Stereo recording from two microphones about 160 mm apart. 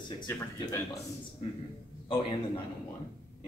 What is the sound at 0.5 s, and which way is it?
Speech, 20° left (ahead or behind).